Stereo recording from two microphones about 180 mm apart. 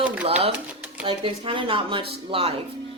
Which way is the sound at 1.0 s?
30° right (ahead or behind).